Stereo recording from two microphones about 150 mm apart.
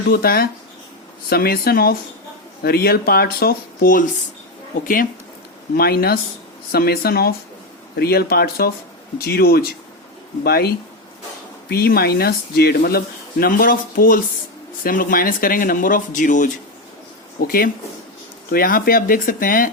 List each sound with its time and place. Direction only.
0.1 s speech: 85° left
5.7 s speech: 90° left
13.4 s speech: 70° left (ahead or behind)
17.4 s speech: 80° left